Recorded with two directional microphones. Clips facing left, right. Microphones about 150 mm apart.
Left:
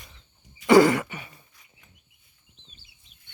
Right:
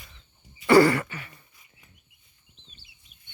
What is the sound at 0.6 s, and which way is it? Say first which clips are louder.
Throat clearing: left 1 dB; 15° left (ahead or behind).